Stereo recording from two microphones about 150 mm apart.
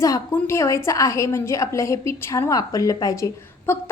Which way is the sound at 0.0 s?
20° left (ahead or behind).